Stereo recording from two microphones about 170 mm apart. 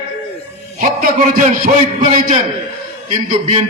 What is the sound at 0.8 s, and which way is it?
A man's voice, 55° right (ahead or behind).